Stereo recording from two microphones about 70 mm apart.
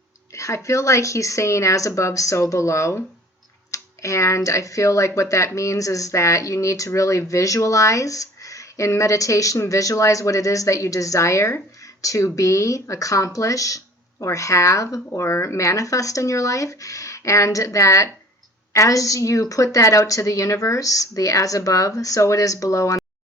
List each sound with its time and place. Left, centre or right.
0.3 s speech: left